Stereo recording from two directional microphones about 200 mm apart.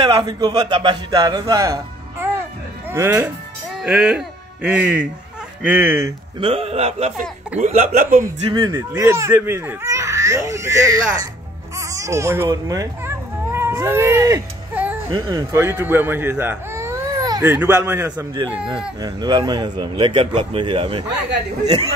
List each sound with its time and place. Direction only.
0.0 s a man's voice: 20° right (ahead or behind)
6.4 s speech: 30° right (ahead or behind)
8.5 s a man's voice: 25° right (ahead or behind)
11.9 s a sound: 15° right (ahead or behind)
15.0 s speech: 20° right (ahead or behind)
18.1 s a man's voice: 20° right (ahead or behind)